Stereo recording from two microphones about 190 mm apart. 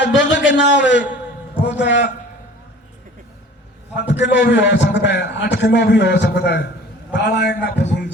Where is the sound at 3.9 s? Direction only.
70° left (ahead or behind).